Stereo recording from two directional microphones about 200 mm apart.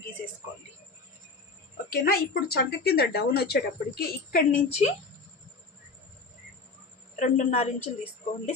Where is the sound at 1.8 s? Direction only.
50° left (ahead or behind).